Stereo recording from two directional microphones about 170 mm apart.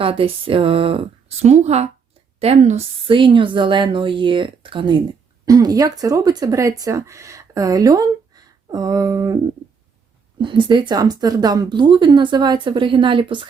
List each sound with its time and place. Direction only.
0.0 s speech: 35° right (ahead or behind)
3.1 s speech: 30° right (ahead or behind)
10.4 s speech: 30° right (ahead or behind)